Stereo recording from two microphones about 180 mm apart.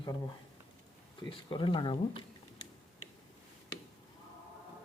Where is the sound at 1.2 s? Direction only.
30° left (ahead or behind).